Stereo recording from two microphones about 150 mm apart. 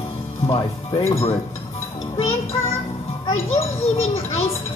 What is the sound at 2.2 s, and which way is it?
Music, 40° left (ahead or behind).